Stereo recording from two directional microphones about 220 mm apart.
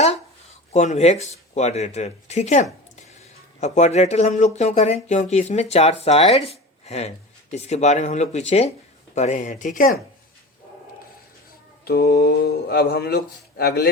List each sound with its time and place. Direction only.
0.7 s speech: 30° left (ahead or behind)
11.9 s speech: 45° left (ahead or behind)